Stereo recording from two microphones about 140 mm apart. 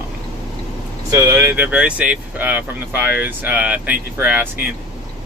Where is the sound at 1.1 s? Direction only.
20° right (ahead or behind).